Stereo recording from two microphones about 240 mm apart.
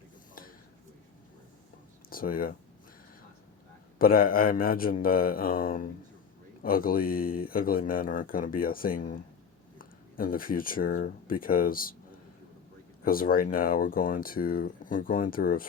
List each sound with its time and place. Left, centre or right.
2.0 s speech: left
3.9 s speech: left
13.1 s speech: left